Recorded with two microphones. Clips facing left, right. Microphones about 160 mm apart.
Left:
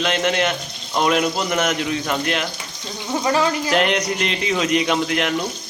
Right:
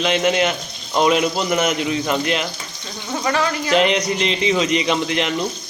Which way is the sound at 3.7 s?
Centre (ahead or behind).